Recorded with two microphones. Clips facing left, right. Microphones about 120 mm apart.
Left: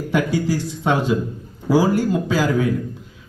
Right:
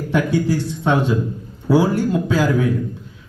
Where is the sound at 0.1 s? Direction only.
10° left (ahead or behind).